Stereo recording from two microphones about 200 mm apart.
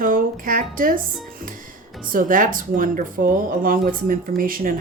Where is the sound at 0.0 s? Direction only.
45° right (ahead or behind).